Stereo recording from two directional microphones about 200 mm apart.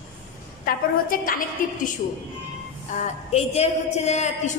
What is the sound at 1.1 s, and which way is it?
Speech, 45° left (ahead or behind).